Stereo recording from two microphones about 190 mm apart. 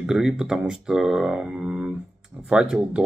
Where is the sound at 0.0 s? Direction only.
5° right (ahead or behind).